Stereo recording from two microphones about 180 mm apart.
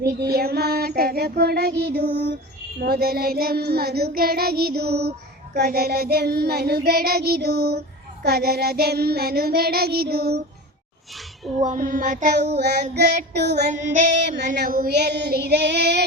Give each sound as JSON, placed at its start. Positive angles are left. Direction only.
{"t": 0.0, "sound": "child singing", "side_deg": -60}
{"t": 11.6, "sound": "female singing", "side_deg": -45}
{"t": 12.5, "sound": "child singing", "side_deg": -65}
{"t": 13.1, "sound": "child singing", "side_deg": -40}
{"t": 13.4, "sound": "child singing", "side_deg": -70}
{"t": 13.8, "sound": "child singing", "side_deg": -40}
{"t": 14.5, "sound": "child singing", "side_deg": -60}